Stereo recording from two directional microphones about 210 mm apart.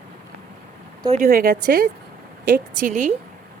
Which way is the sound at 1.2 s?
45° right (ahead or behind).